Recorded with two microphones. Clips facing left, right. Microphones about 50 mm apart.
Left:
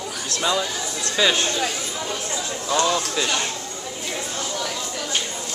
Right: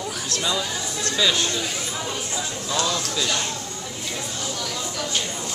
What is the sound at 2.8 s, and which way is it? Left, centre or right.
Speech, left.